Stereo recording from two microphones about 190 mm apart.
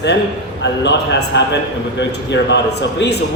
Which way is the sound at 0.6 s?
70° left (ahead or behind).